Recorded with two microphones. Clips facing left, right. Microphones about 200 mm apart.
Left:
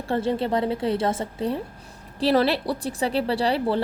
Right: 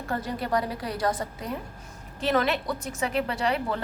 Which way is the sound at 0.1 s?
25° left (ahead or behind).